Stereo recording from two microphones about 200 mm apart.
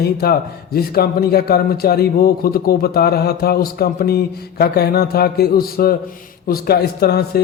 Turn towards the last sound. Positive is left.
turn(degrees=50)  # may be behind; listen again after turning